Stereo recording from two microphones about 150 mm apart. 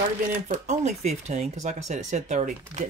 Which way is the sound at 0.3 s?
55° right (ahead or behind).